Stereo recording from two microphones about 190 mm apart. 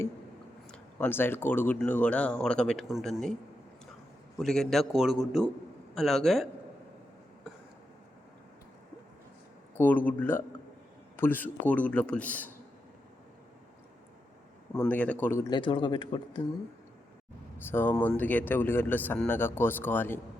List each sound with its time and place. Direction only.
0.7 s speech: 10° left (ahead or behind)
4.4 s a man's voice: centre (ahead or behind)
9.7 s speech: 10° left (ahead or behind)
14.7 s a man's voice: 10° left (ahead or behind); by 16.4 s 25° left (ahead or behind)
17.6 s speech: 10° left (ahead or behind)